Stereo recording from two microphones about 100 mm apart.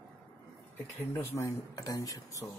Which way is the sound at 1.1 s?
25° left (ahead or behind).